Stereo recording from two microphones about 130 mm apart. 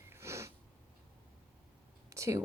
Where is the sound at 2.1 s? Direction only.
25° right (ahead or behind).